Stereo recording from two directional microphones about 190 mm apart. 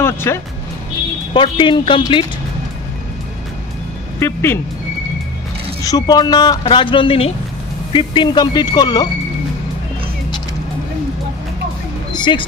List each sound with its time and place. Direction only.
0.0 s speech: 15° left (ahead or behind)
1.3 s a man's voice: 25° left (ahead or behind)
4.2 s speech: 10° left (ahead or behind)
5.9 s a man's voice: 20° left (ahead or behind)
12.1 s music: 25° left (ahead or behind)